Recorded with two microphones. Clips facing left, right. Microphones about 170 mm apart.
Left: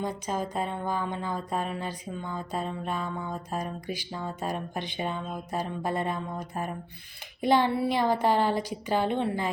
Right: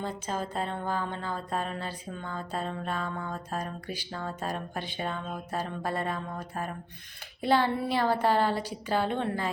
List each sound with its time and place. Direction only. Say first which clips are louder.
0.0 s speech: left 2 dB; 15° left (ahead or behind)